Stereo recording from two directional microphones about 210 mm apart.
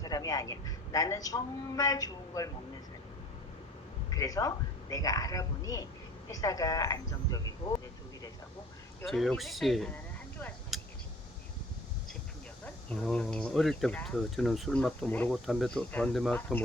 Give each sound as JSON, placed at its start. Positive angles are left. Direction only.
{"t": 0.0, "sound": "a man's voice", "side_deg": 15}
{"t": 4.1, "sound": "a man's voice", "side_deg": 15}
{"t": 9.0, "sound": "speech", "side_deg": 0}
{"t": 12.6, "sound": "speech", "side_deg": 5}